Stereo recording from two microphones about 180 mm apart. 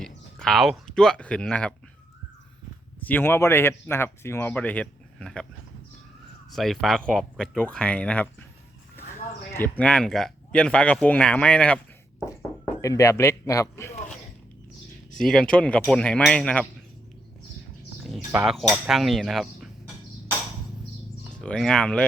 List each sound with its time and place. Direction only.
0.0 s speech: 5° left (ahead or behind)
3.0 s speech: 10° left (ahead or behind)
6.6 s speech: centre (ahead or behind)
9.6 s speech: 5° left (ahead or behind)
12.8 s speech: 15° left (ahead or behind)
15.2 s speech: 5° left (ahead or behind)
18.7 s speech: centre (ahead or behind)
21.4 s speech: 5° left (ahead or behind)